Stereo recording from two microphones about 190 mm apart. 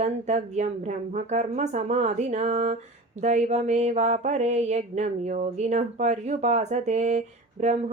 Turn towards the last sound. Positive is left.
turn(degrees=-40)  # may be behind; listen again after turning